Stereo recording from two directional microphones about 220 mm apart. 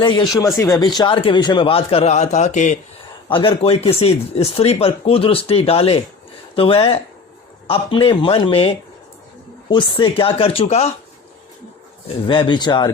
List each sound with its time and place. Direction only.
0.0 s speech: 20° left (ahead or behind)
12.0 s speech: 20° left (ahead or behind)